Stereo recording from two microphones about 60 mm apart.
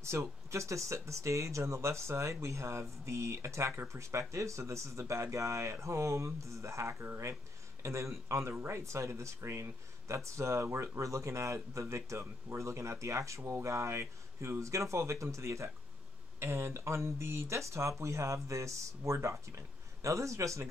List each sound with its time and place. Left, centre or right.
0.0 s speech: right